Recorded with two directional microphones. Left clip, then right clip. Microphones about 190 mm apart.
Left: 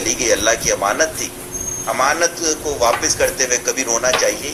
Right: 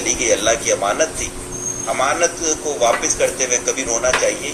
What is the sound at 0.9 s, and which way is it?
Speech, 15° left (ahead or behind).